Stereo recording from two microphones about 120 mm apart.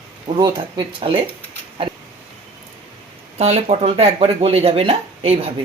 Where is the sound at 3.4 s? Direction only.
60° right (ahead or behind).